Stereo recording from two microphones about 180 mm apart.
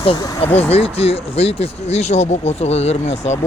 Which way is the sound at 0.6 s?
35° left (ahead or behind).